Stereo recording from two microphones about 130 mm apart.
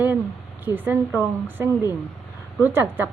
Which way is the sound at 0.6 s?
15° right (ahead or behind).